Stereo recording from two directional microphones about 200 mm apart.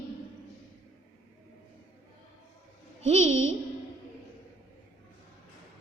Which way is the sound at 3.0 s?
35° right (ahead or behind).